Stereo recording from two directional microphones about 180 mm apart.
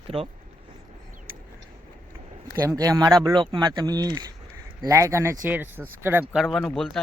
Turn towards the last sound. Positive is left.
turn(degrees=0)  # may be behind; listen again after turning